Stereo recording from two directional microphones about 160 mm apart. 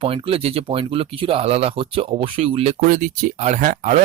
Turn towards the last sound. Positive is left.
turn(degrees=-50)  # may be behind; listen again after turning